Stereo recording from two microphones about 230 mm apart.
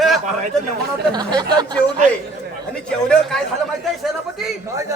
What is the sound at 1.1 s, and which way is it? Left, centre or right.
Speech, centre.